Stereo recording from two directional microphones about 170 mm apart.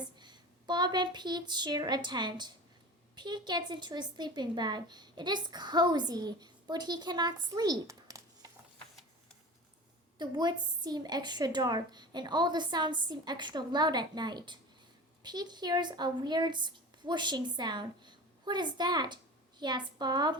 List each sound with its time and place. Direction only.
0.2 s a woman's voice: 25° right (ahead or behind)
10.2 s a woman's voice: 25° right (ahead or behind)